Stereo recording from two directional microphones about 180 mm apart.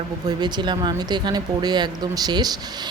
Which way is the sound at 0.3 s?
25° right (ahead or behind).